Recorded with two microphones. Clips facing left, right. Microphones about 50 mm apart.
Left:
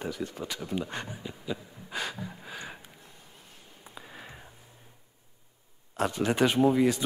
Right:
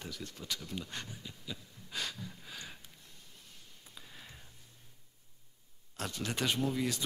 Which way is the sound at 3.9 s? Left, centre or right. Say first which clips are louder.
Left 8 dB; left.